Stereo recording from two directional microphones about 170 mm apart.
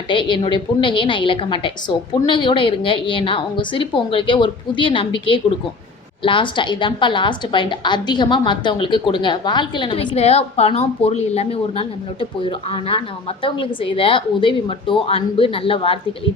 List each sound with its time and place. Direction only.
0.1 s a woman's voice: 30° left (ahead or behind)